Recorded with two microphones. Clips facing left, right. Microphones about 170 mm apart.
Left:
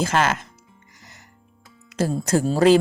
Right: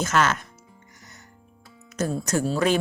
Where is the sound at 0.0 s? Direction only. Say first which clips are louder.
Left 2 dB; 30° left (ahead or behind).